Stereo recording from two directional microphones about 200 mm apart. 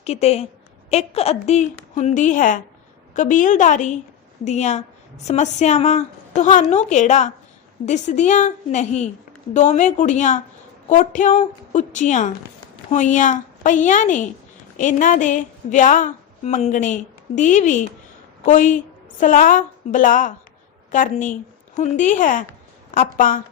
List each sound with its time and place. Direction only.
0.0 s a woman's voice: 30° left (ahead or behind)